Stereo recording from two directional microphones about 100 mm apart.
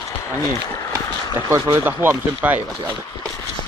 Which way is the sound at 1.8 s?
20° right (ahead or behind).